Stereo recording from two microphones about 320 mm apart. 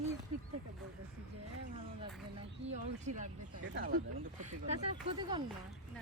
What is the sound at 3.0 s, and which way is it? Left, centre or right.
Speech, right.